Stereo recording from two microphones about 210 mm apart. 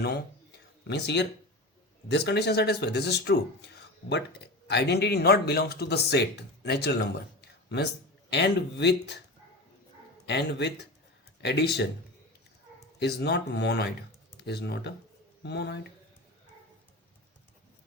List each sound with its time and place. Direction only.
0.9 s speech: 55° left (ahead or behind)
8.3 s speech: 55° left (ahead or behind)
10.2 s speech: 55° left (ahead or behind)
13.0 s speech: 50° left (ahead or behind)